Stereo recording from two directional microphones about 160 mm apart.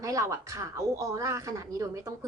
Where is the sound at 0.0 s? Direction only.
20° right (ahead or behind).